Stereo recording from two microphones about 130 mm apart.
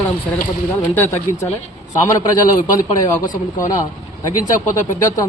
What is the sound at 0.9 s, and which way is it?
Speech, 20° left (ahead or behind).